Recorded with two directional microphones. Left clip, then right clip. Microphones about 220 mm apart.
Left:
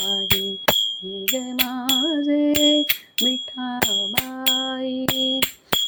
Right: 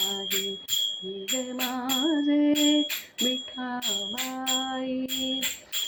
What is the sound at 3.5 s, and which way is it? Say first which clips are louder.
Music: left 7 dB; 45° left (ahead or behind).